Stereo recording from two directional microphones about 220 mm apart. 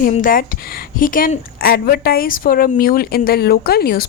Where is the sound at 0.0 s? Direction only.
40° left (ahead or behind).